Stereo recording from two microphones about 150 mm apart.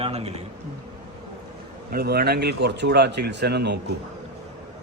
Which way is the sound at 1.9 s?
90° right.